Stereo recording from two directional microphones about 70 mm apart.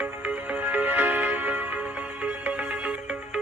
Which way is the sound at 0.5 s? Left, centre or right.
Right.